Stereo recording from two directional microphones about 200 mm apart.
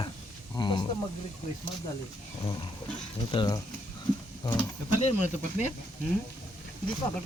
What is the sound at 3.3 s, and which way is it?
Speech, 20° left (ahead or behind).